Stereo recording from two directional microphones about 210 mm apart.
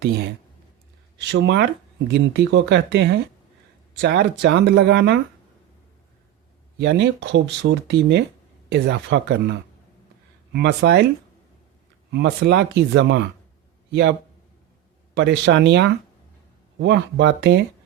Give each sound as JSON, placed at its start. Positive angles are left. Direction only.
{"t": 1.3, "sound": "speech", "side_deg": -55}
{"t": 6.7, "sound": "speech", "side_deg": -55}
{"t": 12.1, "sound": "speech", "side_deg": -55}